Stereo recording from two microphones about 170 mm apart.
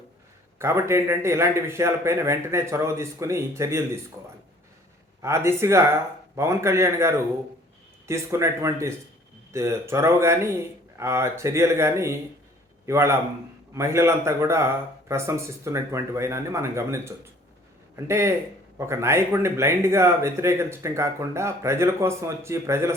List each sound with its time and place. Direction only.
0.6 s speech: 15° right (ahead or behind)
5.2 s a man's voice: 15° right (ahead or behind)